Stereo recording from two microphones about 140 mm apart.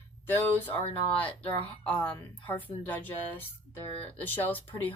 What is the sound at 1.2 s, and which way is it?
Speech, 10° left (ahead or behind).